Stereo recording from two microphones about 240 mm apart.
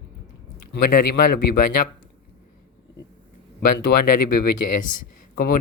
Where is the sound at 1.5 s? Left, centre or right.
Left.